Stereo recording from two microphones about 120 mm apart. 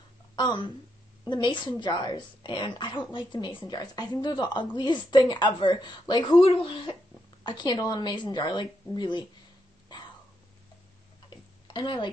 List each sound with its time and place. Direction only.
0.4 s a woman's voice: 40° left (ahead or behind)
7.4 s a woman's voice: 35° left (ahead or behind)
9.9 s a sound: 35° left (ahead or behind)
11.2 s tick-tock: 40° left (ahead or behind)